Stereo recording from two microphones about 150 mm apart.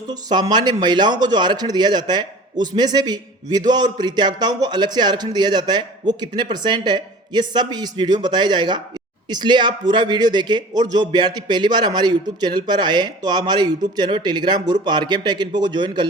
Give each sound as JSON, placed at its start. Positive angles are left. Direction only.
{"t": 0.1, "sound": "speech", "side_deg": -30}